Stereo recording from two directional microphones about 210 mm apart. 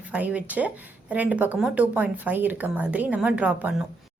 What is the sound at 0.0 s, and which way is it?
Speech, 5° right (ahead or behind).